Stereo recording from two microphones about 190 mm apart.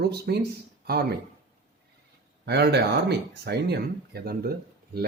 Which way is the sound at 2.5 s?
60° right (ahead or behind).